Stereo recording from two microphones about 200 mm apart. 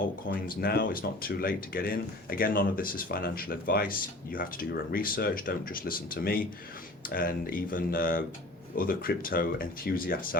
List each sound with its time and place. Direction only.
0.3 s speech: 45° left (ahead or behind)